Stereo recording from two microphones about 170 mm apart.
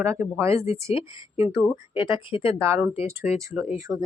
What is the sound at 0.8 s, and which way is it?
Speech, 35° left (ahead or behind).